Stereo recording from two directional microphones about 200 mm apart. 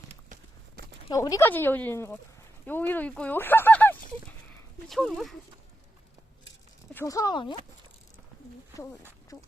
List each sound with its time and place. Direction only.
1.1 s speech: 15° left (ahead or behind); by 5.3 s centre (ahead or behind)
6.9 s speech: 15° left (ahead or behind)
9.3 s speech: 20° left (ahead or behind)